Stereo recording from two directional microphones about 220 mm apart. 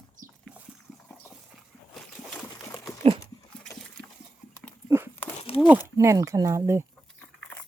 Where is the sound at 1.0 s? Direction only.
Centre (ahead or behind).